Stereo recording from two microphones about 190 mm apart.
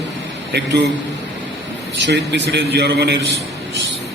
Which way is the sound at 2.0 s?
65° right (ahead or behind).